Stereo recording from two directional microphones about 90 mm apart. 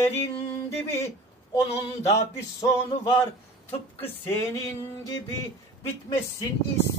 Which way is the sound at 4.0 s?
90° left.